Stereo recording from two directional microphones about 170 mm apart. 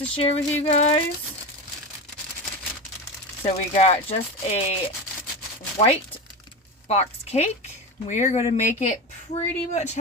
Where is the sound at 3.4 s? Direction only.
35° left (ahead or behind).